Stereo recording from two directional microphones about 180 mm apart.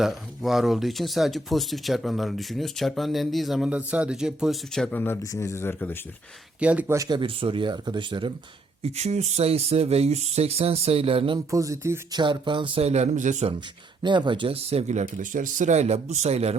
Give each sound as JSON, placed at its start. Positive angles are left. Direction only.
{"t": 0.0, "sound": "speech", "side_deg": 0}
{"t": 6.6, "sound": "speech", "side_deg": -10}
{"t": 8.8, "sound": "speech", "side_deg": -35}
{"t": 11.3, "sound": "speech", "side_deg": -15}
{"t": 12.2, "sound": "speech", "side_deg": -25}
{"t": 14.0, "sound": "speech", "side_deg": -25}